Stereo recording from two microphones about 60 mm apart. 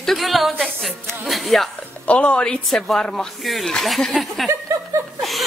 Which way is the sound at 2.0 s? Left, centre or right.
Left.